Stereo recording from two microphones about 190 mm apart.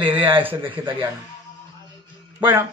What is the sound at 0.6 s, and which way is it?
Speech, 25° right (ahead or behind).